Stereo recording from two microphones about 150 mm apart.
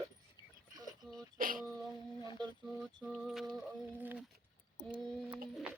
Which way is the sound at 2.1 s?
35° left (ahead or behind).